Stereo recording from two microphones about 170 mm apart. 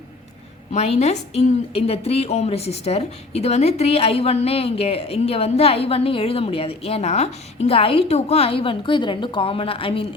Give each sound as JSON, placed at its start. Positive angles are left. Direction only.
{"t": 0.7, "sound": "a woman's voice", "side_deg": 40}